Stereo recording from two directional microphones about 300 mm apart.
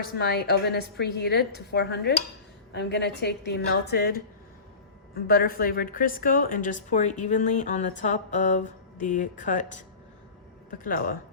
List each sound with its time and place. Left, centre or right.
0.2 s a woman's voice: left